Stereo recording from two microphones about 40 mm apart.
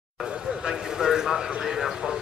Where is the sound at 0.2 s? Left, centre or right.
Centre.